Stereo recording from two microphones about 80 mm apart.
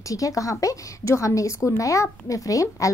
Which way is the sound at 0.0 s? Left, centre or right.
Left.